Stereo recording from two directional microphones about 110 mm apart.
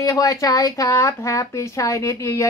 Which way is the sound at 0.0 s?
30° left (ahead or behind).